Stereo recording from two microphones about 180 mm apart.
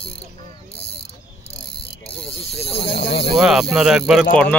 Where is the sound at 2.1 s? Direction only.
30° left (ahead or behind).